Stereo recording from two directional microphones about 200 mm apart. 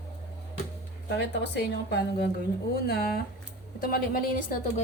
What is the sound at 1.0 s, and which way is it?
A woman's voice, 60° left (ahead or behind).